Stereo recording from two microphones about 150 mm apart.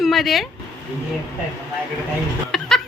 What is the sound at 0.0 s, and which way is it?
Speech, centre (ahead or behind).